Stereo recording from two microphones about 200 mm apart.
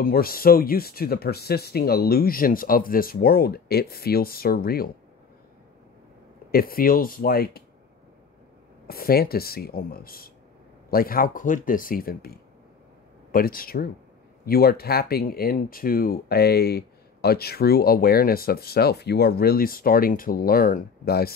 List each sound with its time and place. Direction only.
0.0 s speech: 45° left (ahead or behind)
6.5 s speech: 45° left (ahead or behind)
8.8 s speech: 50° left (ahead or behind)